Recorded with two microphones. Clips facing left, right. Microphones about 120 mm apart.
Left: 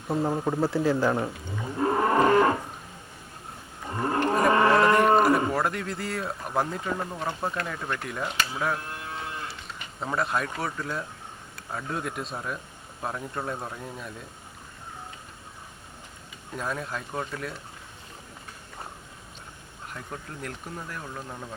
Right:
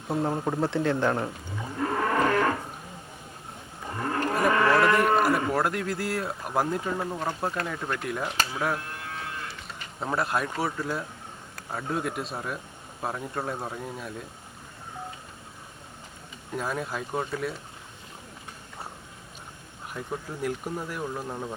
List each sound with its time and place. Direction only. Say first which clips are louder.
0.1 s speech: left 1 dB; centre (ahead or behind)
1.8 s cattle: left 3 dB; 25° left (ahead or behind)
3.9 s cattle: left 3 dB; 25° left (ahead or behind)
4.5 s livestock: left 1 dB; 25° left (ahead or behind)
5.5 s speech: right 1 dB; centre (ahead or behind)
16.6 s speech: right 2 dB; 5° right (ahead or behind)
19.9 s speech: right 5 dB; 5° right (ahead or behind)